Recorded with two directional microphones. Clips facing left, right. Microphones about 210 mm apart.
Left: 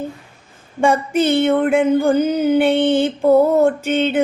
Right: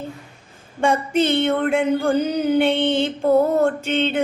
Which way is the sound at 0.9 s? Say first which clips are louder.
Left 3 dB; 10° left (ahead or behind).